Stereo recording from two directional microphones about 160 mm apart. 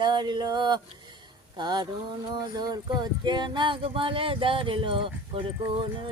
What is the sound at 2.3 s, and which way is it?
Speech, 25° right (ahead or behind).